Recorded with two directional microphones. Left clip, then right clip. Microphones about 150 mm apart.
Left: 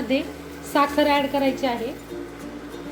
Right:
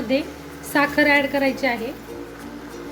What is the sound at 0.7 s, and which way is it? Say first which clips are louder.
A woman's voice: right 2 dB; 10° right (ahead or behind).